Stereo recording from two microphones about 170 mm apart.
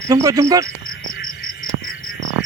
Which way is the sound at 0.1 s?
20° right (ahead or behind).